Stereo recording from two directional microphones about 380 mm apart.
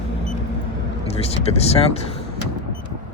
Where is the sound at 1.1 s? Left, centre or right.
Centre.